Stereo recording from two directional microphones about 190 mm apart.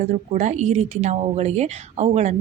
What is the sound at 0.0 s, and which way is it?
A woman's voice, 35° right (ahead or behind).